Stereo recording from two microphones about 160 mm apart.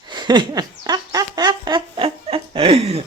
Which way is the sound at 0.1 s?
30° right (ahead or behind).